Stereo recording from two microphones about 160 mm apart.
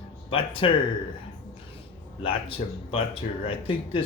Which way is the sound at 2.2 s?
35° left (ahead or behind).